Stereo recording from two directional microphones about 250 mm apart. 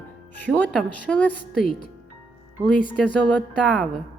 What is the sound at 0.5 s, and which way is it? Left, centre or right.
Speech, centre.